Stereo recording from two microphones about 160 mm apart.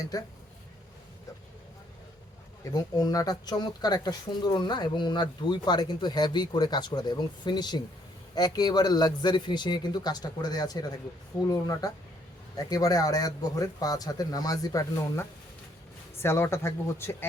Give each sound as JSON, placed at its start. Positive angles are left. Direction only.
{"t": 0.0, "sound": "speech", "side_deg": 20}
{"t": 2.6, "sound": "speech", "side_deg": 25}